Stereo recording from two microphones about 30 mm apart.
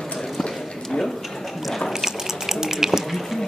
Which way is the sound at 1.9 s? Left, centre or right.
Centre.